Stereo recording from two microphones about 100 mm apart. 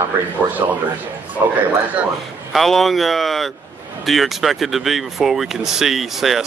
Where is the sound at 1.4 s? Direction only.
30° right (ahead or behind).